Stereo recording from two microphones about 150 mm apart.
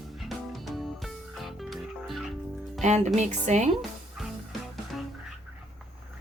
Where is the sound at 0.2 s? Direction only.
Centre (ahead or behind).